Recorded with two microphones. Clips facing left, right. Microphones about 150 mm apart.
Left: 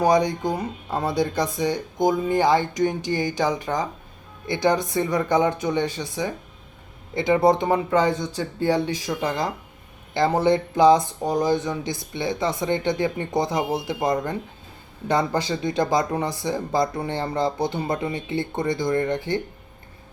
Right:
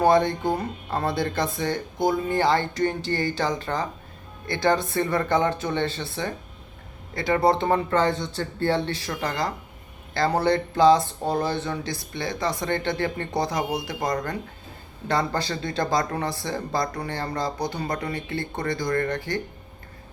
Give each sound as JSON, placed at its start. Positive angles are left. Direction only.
{"t": 0.0, "sound": "speech", "side_deg": 15}